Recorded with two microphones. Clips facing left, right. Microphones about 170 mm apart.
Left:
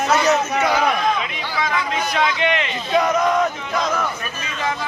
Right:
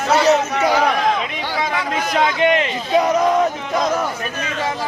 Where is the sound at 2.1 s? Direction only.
45° right (ahead or behind).